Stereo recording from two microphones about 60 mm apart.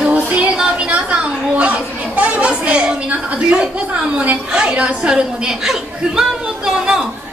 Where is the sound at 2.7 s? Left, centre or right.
Right.